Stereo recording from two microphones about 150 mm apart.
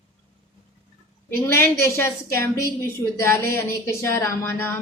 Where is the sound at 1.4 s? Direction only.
15° left (ahead or behind).